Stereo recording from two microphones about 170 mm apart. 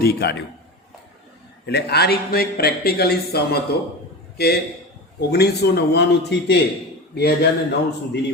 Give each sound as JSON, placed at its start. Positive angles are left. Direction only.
{"t": 0.0, "sound": "a man's voice", "side_deg": 75}
{"t": 1.6, "sound": "a man's voice", "side_deg": 75}
{"t": 7.2, "sound": "a man's voice", "side_deg": 75}